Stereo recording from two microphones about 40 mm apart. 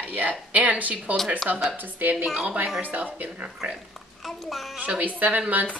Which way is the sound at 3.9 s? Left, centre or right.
Centre.